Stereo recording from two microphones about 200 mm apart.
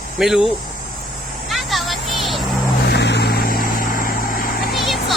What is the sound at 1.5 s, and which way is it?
Music, centre (ahead or behind).